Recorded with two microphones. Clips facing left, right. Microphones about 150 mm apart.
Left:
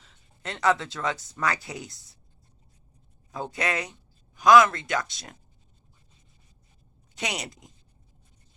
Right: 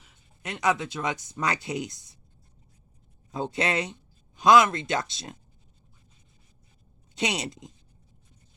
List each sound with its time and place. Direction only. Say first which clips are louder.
0.0 s speech: left 1 dB; 15° right (ahead or behind)
3.3 s speech: right 2 dB; 25° right (ahead or behind)
7.2 s speech: right 4 dB; 25° right (ahead or behind)